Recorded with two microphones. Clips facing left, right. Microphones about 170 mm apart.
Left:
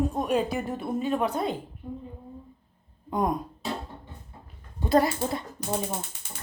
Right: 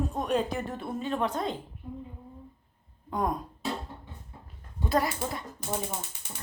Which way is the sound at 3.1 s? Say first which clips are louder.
Left 3 dB; 20° left (ahead or behind).